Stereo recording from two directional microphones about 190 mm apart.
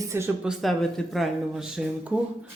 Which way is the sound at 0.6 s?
Centre (ahead or behind).